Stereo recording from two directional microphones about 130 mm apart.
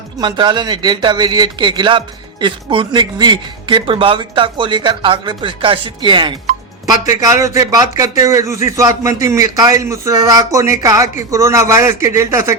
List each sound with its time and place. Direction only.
0.2 s speech: 35° right (ahead or behind)
6.8 s a man's voice: 25° right (ahead or behind)